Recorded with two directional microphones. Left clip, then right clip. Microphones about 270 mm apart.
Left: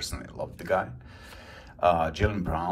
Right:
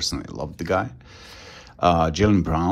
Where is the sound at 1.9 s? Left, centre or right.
Right.